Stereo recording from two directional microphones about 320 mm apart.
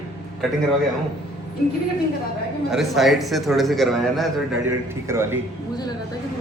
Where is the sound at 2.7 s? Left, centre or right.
Centre.